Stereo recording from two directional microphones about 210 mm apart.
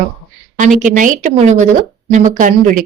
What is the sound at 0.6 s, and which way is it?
A woman's voice, 35° right (ahead or behind).